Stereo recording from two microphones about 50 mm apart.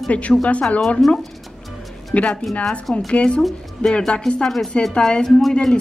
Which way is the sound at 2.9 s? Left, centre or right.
Left.